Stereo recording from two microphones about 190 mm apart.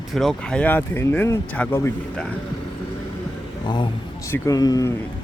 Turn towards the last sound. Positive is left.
turn(degrees=20)  # may be behind; listen again after turning